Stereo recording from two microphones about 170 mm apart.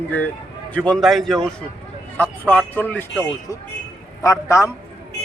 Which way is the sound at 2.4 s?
10° left (ahead or behind).